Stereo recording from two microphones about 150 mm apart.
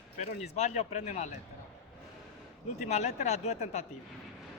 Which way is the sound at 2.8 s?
50° left (ahead or behind).